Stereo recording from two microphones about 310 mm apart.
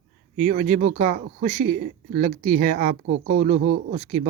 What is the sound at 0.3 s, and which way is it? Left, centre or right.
Speech, right.